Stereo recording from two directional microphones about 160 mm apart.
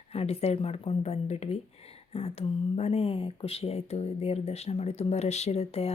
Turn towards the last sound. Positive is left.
turn(degrees=40)  # may be behind; listen again after turning